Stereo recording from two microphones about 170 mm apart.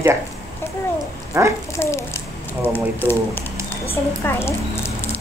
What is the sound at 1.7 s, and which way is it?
A child's voice, 15° left (ahead or behind).